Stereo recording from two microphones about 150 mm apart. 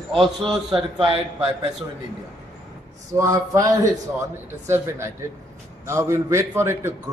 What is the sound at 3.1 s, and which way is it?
Speech, 20° right (ahead or behind).